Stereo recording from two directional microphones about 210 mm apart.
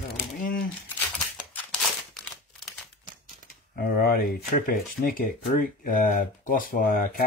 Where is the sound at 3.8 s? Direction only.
45° left (ahead or behind).